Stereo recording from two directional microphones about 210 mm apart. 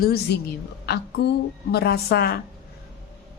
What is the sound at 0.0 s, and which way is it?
Speech, 50° left (ahead or behind).